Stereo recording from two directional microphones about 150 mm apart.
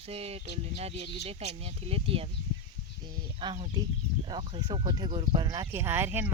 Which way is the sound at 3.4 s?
40° right (ahead or behind).